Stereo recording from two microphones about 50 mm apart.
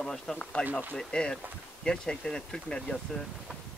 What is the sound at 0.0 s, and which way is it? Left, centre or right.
Speech, centre.